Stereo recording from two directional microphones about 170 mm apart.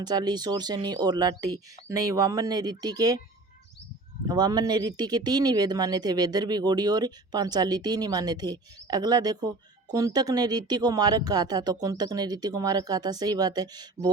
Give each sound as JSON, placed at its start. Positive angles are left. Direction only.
{"t": 0.0, "sound": "speech", "side_deg": -25}
{"t": 4.3, "sound": "speech", "side_deg": -25}